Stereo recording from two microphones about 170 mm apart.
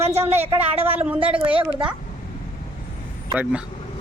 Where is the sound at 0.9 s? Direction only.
10° right (ahead or behind).